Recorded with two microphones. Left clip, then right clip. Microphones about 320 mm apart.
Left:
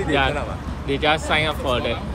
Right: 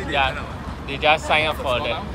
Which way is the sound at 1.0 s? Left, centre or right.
Centre.